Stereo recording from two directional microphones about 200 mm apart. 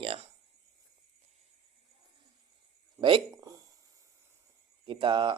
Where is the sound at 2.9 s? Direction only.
25° right (ahead or behind).